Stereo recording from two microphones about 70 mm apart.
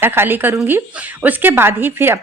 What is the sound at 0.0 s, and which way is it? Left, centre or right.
Speech, right.